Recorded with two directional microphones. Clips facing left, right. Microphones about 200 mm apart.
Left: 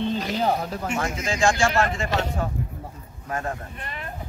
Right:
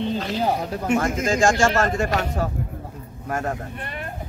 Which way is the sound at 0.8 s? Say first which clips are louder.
Right 8 dB; 50° right (ahead or behind).